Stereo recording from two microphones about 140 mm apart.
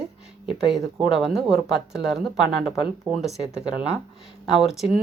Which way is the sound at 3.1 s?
30° right (ahead or behind).